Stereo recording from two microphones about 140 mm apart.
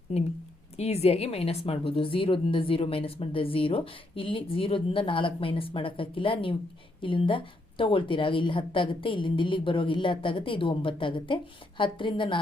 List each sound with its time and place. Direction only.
0.1 s speech: 50° left (ahead or behind)